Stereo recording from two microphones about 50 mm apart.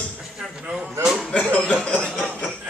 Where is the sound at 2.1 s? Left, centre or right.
Centre.